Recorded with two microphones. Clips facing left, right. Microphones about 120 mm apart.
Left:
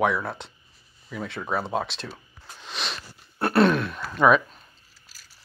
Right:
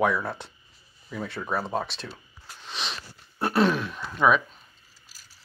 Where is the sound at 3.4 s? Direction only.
65° left (ahead or behind).